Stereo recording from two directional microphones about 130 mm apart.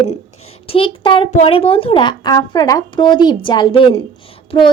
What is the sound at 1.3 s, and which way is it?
Speech, 65° left (ahead or behind).